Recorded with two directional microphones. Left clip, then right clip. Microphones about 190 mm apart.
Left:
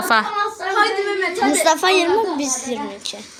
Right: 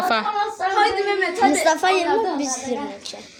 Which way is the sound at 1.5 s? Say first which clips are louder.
Left 5 dB; 50° left (ahead or behind).